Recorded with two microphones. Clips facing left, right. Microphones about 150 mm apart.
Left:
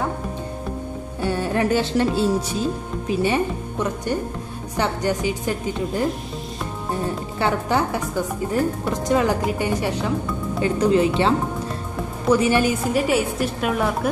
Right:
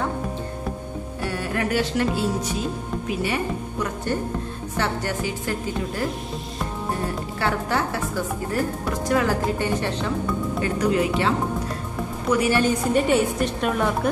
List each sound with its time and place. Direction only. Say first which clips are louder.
1.2 s music: left 5 dB; 25° left (ahead or behind)
3.1 s a woman's voice: left 5 dB; 25° left (ahead or behind)
7.3 s a woman's voice: left 3 dB; 20° left (ahead or behind)
10.6 s a woman's voice: left 5 dB; 25° left (ahead or behind)
12.6 s a woman's voice: even; 5° left (ahead or behind)